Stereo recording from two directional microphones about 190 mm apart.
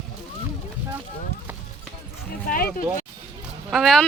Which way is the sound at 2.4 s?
50° left (ahead or behind).